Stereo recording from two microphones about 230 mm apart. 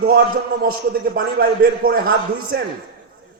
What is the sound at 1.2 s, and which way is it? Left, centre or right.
A man's voice, right.